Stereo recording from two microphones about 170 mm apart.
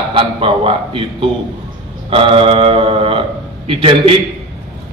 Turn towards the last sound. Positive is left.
turn(degrees=-30)  # may be behind; listen again after turning